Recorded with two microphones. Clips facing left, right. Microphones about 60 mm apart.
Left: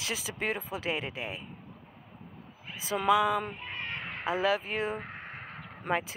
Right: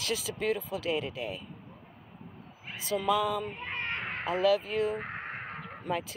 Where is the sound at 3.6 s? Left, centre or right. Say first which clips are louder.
Right 3 dB; right.